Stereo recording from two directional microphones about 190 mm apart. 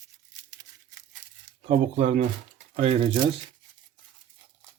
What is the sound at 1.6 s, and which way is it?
Speech, 35° right (ahead or behind).